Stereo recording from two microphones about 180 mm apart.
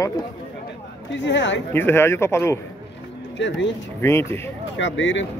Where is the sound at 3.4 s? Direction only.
90° left.